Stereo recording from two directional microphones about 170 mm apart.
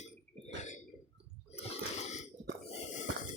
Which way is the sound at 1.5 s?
40° left (ahead or behind).